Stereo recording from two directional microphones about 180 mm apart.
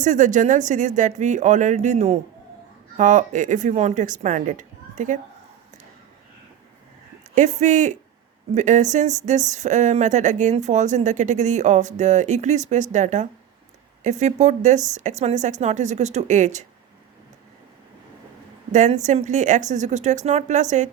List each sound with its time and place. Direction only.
0.0 s speech: 45° right (ahead or behind)
7.3 s speech: 40° right (ahead or behind)
18.7 s speech: 40° right (ahead or behind)